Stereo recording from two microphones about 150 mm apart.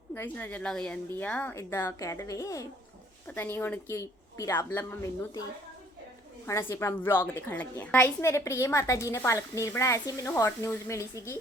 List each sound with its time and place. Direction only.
0.1 s a woman's voice: 10° left (ahead or behind)
6.4 s a woman's voice: 15° left (ahead or behind)